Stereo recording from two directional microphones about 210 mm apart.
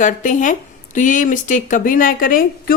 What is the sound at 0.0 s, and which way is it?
Speech, 35° left (ahead or behind).